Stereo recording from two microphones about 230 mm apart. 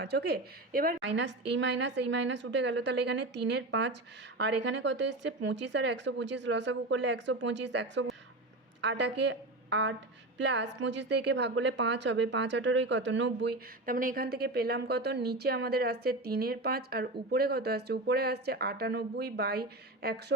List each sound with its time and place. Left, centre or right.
0.0 s a woman's voice: right